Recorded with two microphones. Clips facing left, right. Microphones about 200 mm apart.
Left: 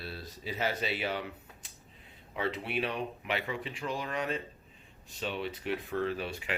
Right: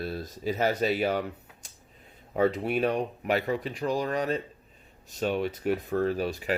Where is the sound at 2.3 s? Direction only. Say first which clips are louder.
Right 8 dB; 45° right (ahead or behind).